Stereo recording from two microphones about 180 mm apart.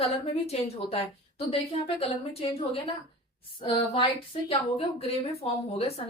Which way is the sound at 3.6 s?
30° left (ahead or behind).